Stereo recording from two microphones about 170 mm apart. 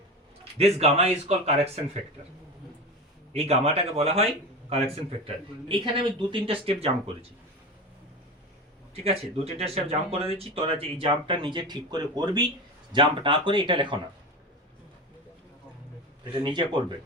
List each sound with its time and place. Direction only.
0.6 s speech: 40° right (ahead or behind)
3.3 s speech: 35° right (ahead or behind)
9.0 s speech: 35° right (ahead or behind)
16.3 s speech: 30° right (ahead or behind)